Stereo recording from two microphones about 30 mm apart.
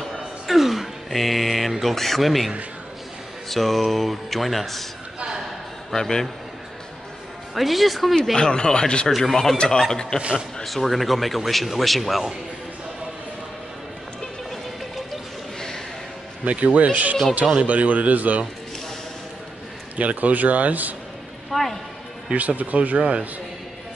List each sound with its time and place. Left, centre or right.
0.1 s a sound: centre
1.7 s a man's voice: centre
5.9 s speech: centre
7.5 s a man's voice: centre
8.4 s speech: left
9.1 s speech: centre
10.6 s a man's voice: centre
16.4 s a man's voice: right
20.0 s speech: right
21.5 s speech: centre
22.6 s a man's voice: right